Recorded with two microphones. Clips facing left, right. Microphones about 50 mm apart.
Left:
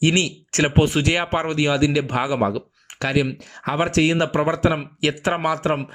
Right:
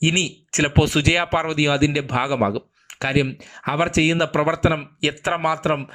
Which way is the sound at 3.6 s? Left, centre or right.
Right.